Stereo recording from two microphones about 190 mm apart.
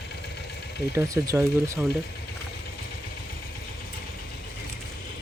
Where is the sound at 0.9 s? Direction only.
15° right (ahead or behind).